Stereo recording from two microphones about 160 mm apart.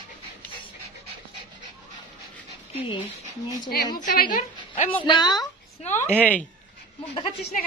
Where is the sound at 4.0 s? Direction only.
55° left (ahead or behind).